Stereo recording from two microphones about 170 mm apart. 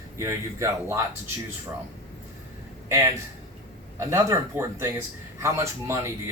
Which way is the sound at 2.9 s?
20° right (ahead or behind).